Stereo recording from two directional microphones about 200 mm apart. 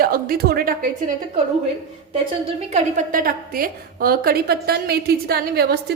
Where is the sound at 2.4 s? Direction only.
35° right (ahead or behind).